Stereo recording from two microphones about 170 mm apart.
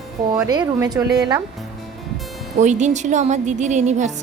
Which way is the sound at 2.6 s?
45° right (ahead or behind).